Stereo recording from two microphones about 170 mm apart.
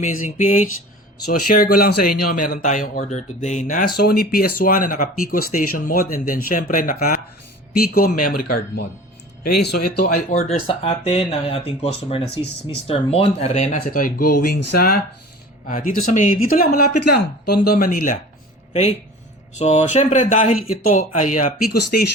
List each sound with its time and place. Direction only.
0.0 s speech: 50° left (ahead or behind)
1.5 s speech: 60° left (ahead or behind)
18.7 s speech: 40° left (ahead or behind)